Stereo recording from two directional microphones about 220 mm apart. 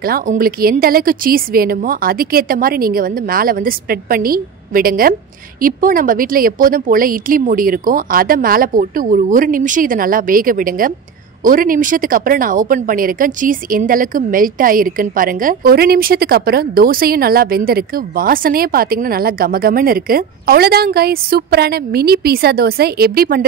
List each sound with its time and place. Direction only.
0.0 s a woman's voice: 40° right (ahead or behind)